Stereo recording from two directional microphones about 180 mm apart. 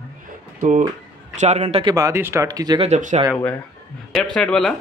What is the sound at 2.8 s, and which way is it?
Speech, 40° right (ahead or behind).